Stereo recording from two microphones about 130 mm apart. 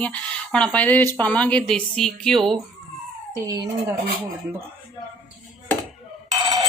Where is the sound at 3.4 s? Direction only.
30° right (ahead or behind).